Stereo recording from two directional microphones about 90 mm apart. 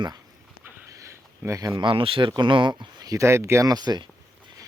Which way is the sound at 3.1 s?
35° right (ahead or behind).